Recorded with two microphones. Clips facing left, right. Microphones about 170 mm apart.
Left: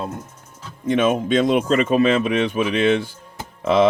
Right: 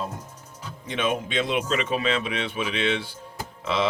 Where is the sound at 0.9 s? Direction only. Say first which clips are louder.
Left 9 dB; 50° left (ahead or behind).